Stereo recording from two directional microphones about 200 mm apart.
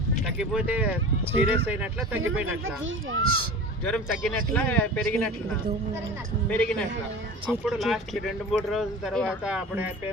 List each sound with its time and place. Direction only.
0.3 s speech: 5° right (ahead or behind)
2.5 s a child's voice: 80° right
3.8 s speech: 5° left (ahead or behind)
6.5 s speech: 5° left (ahead or behind)